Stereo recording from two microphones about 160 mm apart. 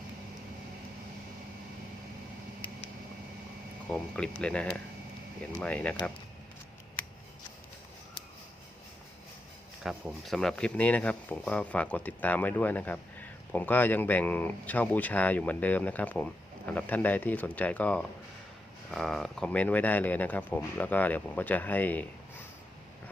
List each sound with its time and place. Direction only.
3.8 s speech: 5° left (ahead or behind)
9.8 s speech: centre (ahead or behind)